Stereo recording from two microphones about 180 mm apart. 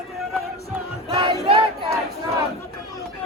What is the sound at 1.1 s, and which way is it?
Music, 25° right (ahead or behind).